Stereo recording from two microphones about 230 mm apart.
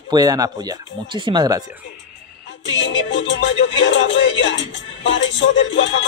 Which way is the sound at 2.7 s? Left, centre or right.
Left.